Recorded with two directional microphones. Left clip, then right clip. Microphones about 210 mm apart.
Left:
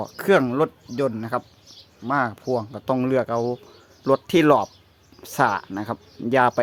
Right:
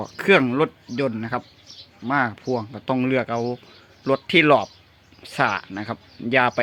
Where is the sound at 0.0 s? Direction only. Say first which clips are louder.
Right 1 dB; 5° left (ahead or behind).